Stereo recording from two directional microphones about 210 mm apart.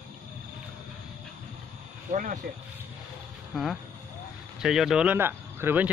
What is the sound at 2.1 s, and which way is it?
Speech, 40° right (ahead or behind).